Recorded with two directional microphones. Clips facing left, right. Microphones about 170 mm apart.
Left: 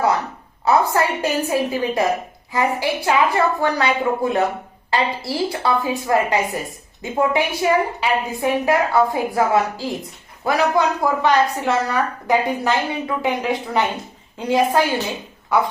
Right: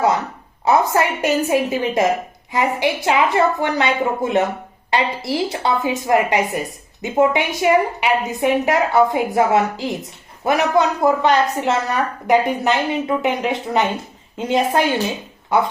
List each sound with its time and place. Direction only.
0.6 s a woman's voice: 20° right (ahead or behind)